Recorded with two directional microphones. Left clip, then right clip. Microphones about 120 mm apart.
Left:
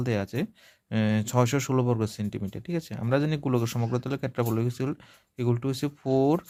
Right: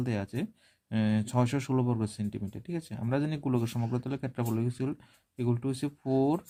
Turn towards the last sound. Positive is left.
turn(degrees=25)  # may be behind; listen again after turning